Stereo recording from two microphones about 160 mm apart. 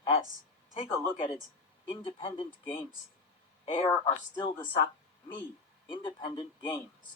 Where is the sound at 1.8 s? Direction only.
35° left (ahead or behind).